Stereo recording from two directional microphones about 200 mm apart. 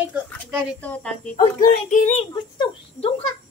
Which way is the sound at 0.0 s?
5° right (ahead or behind).